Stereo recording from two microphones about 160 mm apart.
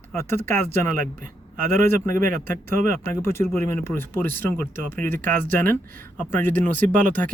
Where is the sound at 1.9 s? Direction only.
15° left (ahead or behind).